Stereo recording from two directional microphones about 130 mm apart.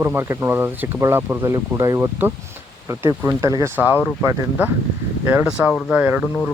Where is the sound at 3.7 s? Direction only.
15° right (ahead or behind).